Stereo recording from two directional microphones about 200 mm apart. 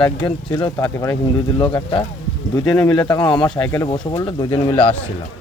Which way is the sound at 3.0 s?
20° left (ahead or behind).